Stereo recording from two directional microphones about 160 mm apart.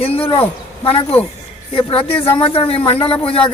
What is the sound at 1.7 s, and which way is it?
Speech, 35° left (ahead or behind).